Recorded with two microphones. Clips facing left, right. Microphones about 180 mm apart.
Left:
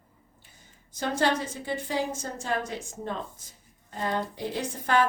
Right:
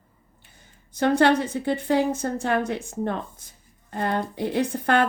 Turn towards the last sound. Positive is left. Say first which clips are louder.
# right 4 dB
turn(degrees=-60)  # may be behind; listen again after turning